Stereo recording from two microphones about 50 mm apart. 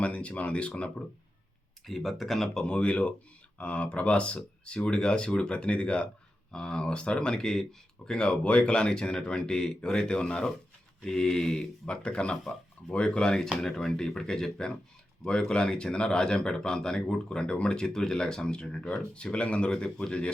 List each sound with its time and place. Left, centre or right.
0.0 s speech: left
1.9 s speech: centre
2.6 s speech: left